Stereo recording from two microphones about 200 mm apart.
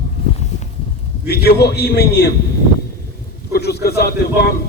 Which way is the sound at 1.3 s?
55° left (ahead or behind).